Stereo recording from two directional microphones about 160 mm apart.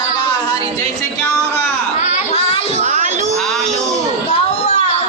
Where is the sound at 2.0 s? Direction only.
45° left (ahead or behind).